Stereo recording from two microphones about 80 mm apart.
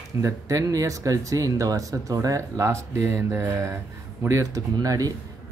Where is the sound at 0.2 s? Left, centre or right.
Right.